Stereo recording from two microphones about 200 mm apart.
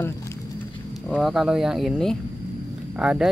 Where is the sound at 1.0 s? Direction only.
Centre (ahead or behind).